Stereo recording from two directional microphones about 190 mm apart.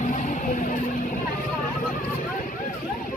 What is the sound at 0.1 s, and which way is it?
Music, 40° left (ahead or behind).